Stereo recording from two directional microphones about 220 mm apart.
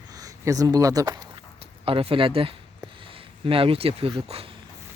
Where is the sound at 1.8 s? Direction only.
25° right (ahead or behind).